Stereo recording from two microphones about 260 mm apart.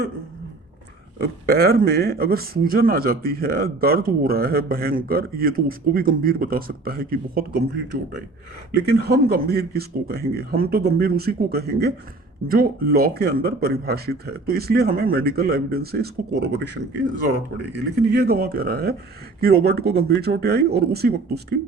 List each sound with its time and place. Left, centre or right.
1.2 s speech: right
18.1 s speech: right